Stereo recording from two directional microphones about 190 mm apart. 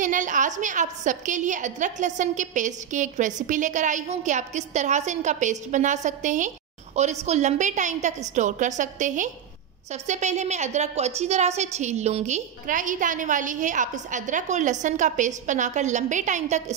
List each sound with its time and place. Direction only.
0.0 s a woman's voice: 40° right (ahead or behind)